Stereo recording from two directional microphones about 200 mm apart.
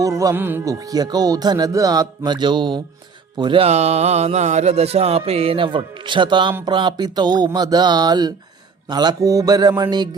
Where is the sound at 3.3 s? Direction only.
25° right (ahead or behind).